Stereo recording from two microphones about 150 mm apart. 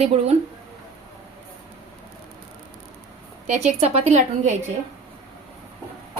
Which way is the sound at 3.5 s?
45° right (ahead or behind).